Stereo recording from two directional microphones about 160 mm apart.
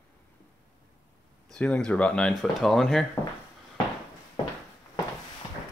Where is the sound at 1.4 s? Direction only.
5° left (ahead or behind).